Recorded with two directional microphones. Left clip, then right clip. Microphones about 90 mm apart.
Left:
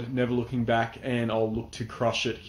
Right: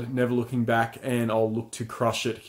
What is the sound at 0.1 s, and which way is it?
Speech, 35° right (ahead or behind).